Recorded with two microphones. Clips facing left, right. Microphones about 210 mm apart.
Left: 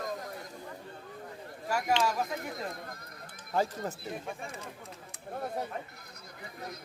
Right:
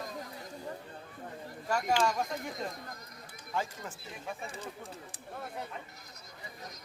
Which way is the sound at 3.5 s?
40° left (ahead or behind).